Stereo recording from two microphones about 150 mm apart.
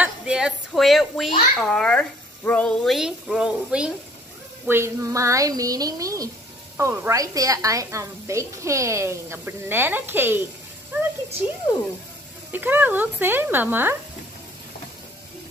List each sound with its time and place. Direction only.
0.0 s speech: 5° right (ahead or behind)
4.6 s a woman's voice: 15° right (ahead or behind)
12.5 s speech: 15° right (ahead or behind)